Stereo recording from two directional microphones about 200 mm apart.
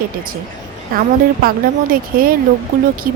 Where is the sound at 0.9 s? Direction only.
45° right (ahead or behind).